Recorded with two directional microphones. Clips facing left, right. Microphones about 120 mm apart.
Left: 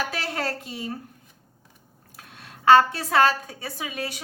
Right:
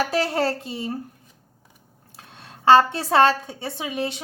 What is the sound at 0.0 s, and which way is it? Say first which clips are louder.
Speech: right 7 dB; 35° right (ahead or behind).